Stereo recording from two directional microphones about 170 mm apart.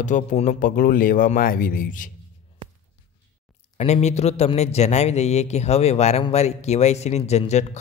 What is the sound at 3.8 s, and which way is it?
A man's voice, 40° left (ahead or behind).